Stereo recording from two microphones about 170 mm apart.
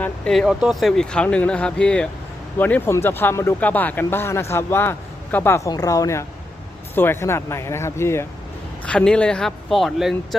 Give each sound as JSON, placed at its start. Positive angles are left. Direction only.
{"t": 0.0, "sound": "speech", "side_deg": 0}